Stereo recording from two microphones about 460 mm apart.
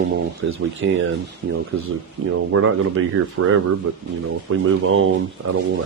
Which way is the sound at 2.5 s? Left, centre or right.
Right.